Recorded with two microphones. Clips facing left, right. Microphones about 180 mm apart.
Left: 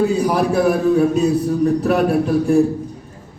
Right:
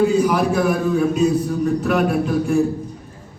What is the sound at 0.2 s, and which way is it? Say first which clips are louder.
A man's voice: left 1 dB; 35° left (ahead or behind).